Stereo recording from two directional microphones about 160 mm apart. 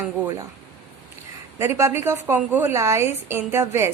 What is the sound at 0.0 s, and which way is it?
Speech, 20° right (ahead or behind).